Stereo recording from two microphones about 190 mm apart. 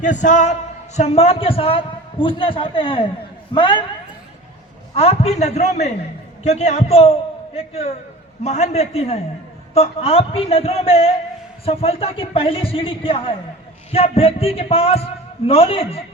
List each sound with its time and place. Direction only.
0.0 s a man's voice: 40° left (ahead or behind); by 3.8 s 25° left (ahead or behind)
4.9 s a man's voice: 35° left (ahead or behind)